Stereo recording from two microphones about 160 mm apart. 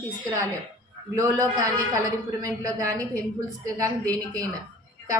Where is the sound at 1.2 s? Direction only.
25° right (ahead or behind).